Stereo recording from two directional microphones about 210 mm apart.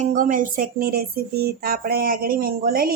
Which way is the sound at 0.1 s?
40° right (ahead or behind).